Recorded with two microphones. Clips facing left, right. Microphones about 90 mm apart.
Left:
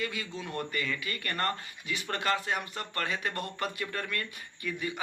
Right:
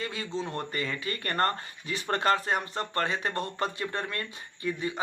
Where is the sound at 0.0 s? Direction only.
30° right (ahead or behind).